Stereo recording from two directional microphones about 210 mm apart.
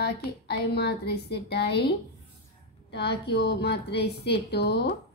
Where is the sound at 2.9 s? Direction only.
50° left (ahead or behind).